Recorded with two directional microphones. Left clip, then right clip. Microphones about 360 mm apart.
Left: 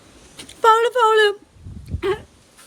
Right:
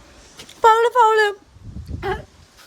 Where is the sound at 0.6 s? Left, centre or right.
Centre.